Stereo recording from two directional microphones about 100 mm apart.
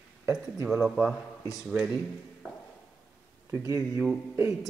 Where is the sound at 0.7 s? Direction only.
5° right (ahead or behind).